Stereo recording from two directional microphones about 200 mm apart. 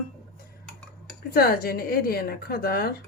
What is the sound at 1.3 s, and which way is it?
A woman's voice, 50° left (ahead or behind).